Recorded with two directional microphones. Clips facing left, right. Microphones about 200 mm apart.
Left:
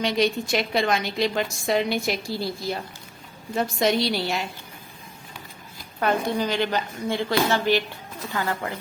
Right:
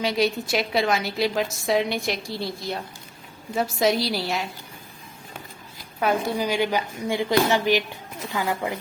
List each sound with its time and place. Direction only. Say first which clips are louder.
0.0 s a woman's voice: even; 5° right (ahead or behind)
6.0 s a woman's voice: even; 5° right (ahead or behind)